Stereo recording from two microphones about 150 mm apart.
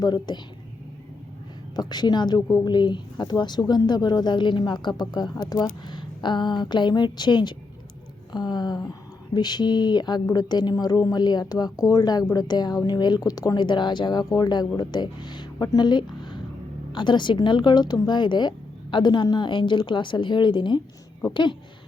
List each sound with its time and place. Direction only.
0.0 s speech: 30° left (ahead or behind)
1.7 s speech: 25° left (ahead or behind)